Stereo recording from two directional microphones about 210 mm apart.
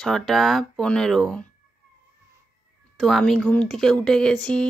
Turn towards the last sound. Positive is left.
turn(degrees=5)  # may be behind; listen again after turning